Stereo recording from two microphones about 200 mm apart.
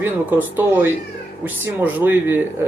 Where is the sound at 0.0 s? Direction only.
10° right (ahead or behind).